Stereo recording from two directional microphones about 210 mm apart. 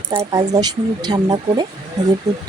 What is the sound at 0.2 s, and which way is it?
Speech, 20° right (ahead or behind).